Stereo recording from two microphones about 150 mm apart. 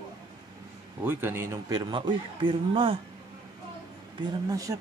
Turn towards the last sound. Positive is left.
turn(degrees=-25)  # may be behind; listen again after turning